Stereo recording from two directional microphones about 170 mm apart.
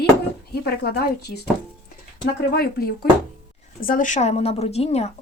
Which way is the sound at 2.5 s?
65° left (ahead or behind).